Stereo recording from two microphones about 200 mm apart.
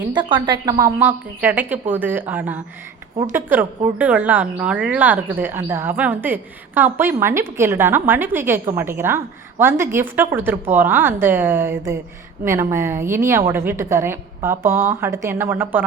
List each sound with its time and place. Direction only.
0.1 s a woman's voice: 25° right (ahead or behind)